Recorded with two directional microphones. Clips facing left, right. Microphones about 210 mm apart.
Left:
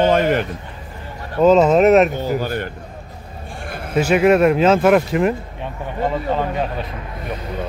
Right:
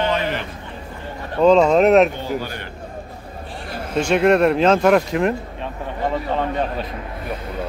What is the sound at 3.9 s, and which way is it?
Speech, 5° left (ahead or behind).